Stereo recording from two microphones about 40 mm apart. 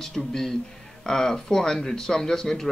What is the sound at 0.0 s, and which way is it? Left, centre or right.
Speech, centre.